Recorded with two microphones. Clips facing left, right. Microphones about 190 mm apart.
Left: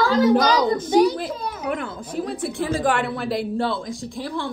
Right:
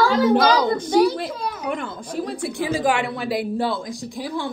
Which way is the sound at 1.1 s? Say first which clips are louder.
Right 1 dB; centre (ahead or behind).